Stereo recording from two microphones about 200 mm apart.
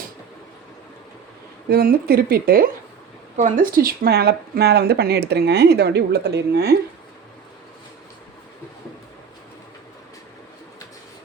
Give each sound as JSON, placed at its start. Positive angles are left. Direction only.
{"t": 1.7, "sound": "speech", "side_deg": -50}